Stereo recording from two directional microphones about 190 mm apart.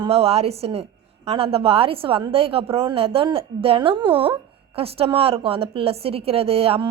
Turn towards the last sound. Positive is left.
turn(degrees=-30)  # may be behind; listen again after turning